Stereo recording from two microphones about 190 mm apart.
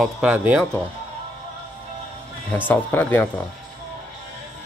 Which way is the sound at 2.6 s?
10° left (ahead or behind).